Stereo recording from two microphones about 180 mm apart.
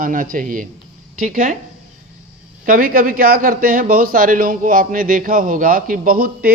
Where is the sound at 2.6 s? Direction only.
50° right (ahead or behind).